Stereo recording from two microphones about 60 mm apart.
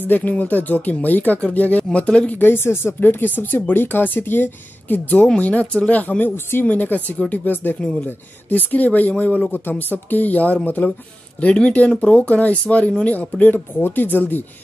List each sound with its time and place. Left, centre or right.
0.1 s speech: left
2.3 s speech: left